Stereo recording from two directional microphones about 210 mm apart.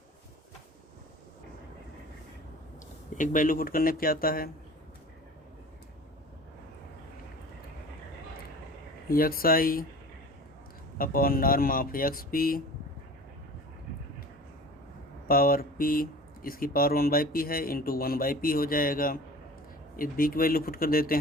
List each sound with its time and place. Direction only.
3.2 s speech: 40° left (ahead or behind)
9.0 s speech: 45° left (ahead or behind)
10.9 s speech: 45° left (ahead or behind)
15.3 s speech: 45° left (ahead or behind)